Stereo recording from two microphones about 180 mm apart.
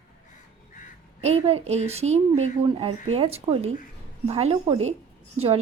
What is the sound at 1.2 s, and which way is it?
Speech, 35° right (ahead or behind).